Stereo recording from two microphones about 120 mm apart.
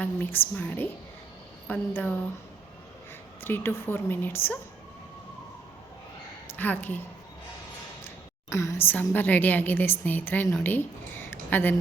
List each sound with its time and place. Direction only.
0.0 s a woman's voice: 15° left (ahead or behind)
3.4 s a woman's voice: 20° left (ahead or behind)
6.6 s a woman's voice: 15° left (ahead or behind)
8.0 s a woman's voice: 25° left (ahead or behind)
11.3 s a sound: 20° left (ahead or behind)